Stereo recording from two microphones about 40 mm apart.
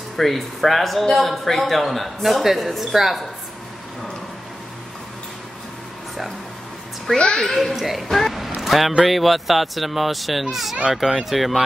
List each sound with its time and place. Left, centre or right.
0.2 s a woman's voice: centre
7.1 s a child's voice: left
7.3 s a woman's voice: centre
8.5 s a sound: centre
9.0 s a woman's voice: centre